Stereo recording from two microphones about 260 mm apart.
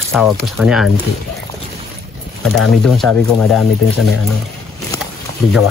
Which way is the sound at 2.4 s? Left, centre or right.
Left.